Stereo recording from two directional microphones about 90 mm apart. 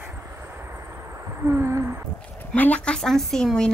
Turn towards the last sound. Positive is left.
turn(degrees=5)  # may be behind; listen again after turning